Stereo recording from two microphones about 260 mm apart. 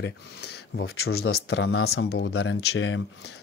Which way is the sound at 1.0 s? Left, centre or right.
Left.